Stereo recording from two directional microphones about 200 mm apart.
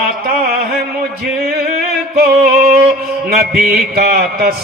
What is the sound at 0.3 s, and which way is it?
Mantra, 45° right (ahead or behind).